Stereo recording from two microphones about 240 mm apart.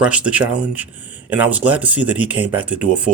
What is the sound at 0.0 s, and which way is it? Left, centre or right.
Speech, centre.